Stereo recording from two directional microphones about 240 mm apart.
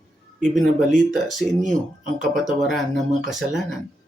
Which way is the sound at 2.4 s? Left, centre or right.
Centre.